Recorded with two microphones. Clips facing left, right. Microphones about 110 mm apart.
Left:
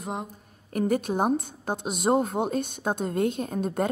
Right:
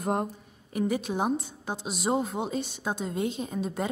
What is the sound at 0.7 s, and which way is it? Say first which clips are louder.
A woman's voice: left 3 dB; 50° left (ahead or behind).